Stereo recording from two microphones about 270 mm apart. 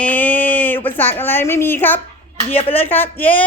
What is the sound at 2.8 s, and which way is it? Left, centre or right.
Speech, centre.